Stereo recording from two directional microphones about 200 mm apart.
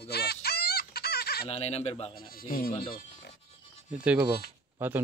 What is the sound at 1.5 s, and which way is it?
Speech, 30° left (ahead or behind).